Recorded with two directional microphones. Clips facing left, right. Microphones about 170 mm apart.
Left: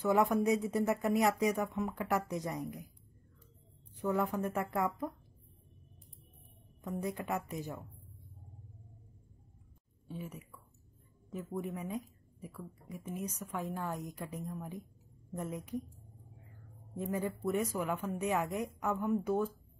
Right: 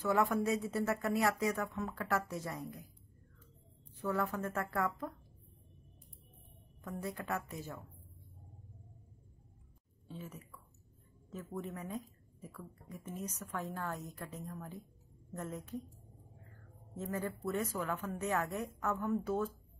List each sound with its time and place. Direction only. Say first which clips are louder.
0.0 s speech: left 3 dB; 15° left (ahead or behind)
3.9 s speech: left 3 dB; 20° left (ahead or behind)
7.0 s speech: left 3 dB; 15° left (ahead or behind)
10.0 s speech: left 3 dB; 10° left (ahead or behind)
16.9 s speech: left 3 dB; 15° left (ahead or behind)